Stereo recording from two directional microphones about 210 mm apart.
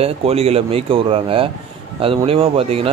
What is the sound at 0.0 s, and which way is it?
Speech, 30° right (ahead or behind).